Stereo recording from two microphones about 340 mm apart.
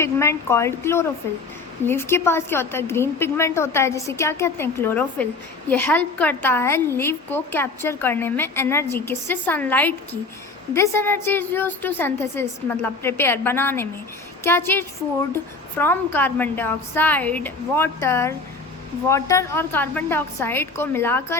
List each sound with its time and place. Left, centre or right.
0.0 s a woman's voice: centre